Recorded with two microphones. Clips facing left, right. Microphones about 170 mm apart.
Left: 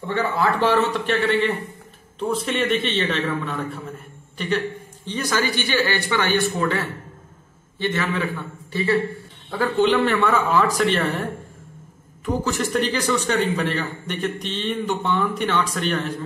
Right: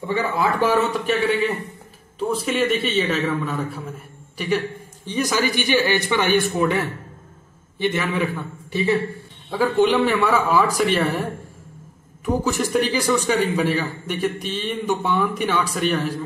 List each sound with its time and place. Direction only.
0.0 s a man's voice: 10° right (ahead or behind)
12.3 s a man's voice: 15° right (ahead or behind)